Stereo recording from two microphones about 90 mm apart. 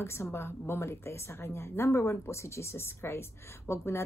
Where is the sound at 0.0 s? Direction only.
30° left (ahead or behind).